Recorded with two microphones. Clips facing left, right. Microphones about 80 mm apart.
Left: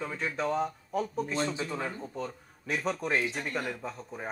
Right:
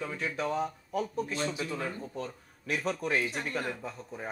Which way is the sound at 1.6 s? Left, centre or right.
Centre.